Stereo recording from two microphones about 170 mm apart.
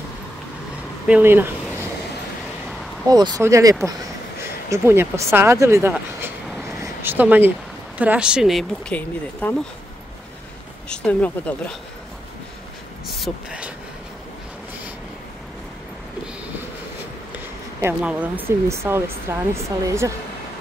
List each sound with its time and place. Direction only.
1.0 s speech: 10° right (ahead or behind)
3.1 s speech: 25° right (ahead or behind); by 9.6 s 10° left (ahead or behind)
10.9 s speech: 5° left (ahead or behind)
13.1 s speech: 5° right (ahead or behind)
17.7 s speech: 10° right (ahead or behind)